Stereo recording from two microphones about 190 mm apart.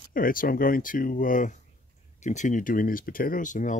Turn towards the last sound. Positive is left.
turn(degrees=40)  # may be behind; listen again after turning